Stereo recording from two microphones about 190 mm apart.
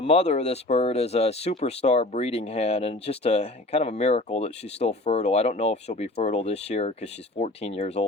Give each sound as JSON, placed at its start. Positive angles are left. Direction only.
{"t": 0.0, "sound": "speech", "side_deg": 35}